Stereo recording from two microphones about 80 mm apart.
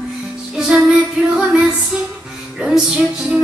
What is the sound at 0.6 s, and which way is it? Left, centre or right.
Female singing, centre.